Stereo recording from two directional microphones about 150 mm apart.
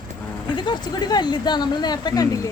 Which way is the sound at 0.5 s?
30° left (ahead or behind).